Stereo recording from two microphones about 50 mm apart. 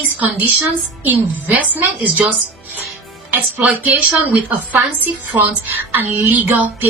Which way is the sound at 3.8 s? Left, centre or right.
Right.